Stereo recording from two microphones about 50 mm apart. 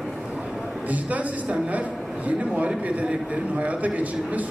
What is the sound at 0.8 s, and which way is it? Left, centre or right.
A man's voice, right.